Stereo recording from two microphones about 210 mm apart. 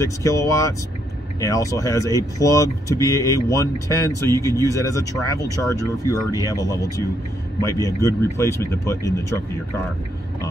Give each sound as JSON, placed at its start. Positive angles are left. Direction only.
{"t": 0.0, "sound": "speech", "side_deg": 15}